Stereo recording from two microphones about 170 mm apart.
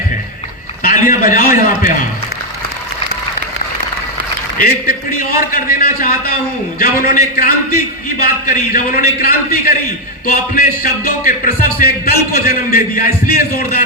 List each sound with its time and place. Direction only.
0.8 s a man's voice: 55° left (ahead or behind)
4.5 s speech: 60° left (ahead or behind)